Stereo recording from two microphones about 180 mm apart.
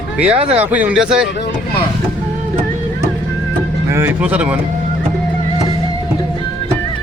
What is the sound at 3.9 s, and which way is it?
Speech, 10° right (ahead or behind).